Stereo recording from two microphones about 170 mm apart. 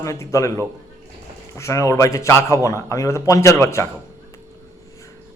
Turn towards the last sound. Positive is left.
turn(degrees=15)  # may be behind; listen again after turning